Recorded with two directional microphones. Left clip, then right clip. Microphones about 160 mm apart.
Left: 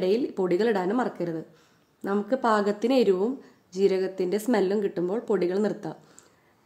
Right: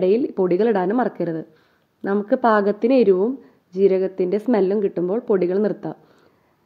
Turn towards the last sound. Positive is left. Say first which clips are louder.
# right 6 dB
turn(degrees=-35)  # may be behind; listen again after turning